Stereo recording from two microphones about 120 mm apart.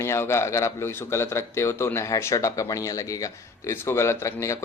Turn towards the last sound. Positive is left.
turn(degrees=25)  # may be behind; listen again after turning